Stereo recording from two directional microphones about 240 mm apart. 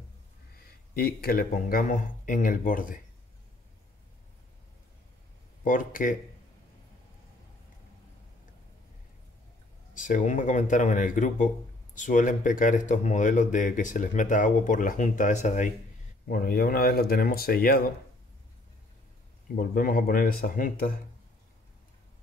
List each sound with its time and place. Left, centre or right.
0.9 s speech: left
5.6 s speech: left
9.9 s speech: left
19.5 s speech: left